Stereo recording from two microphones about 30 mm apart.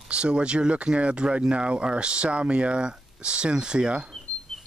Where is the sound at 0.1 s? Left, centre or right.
Right.